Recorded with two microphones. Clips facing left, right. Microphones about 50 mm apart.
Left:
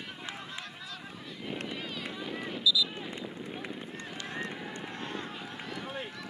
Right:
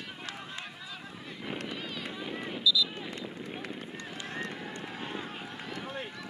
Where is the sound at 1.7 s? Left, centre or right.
Centre.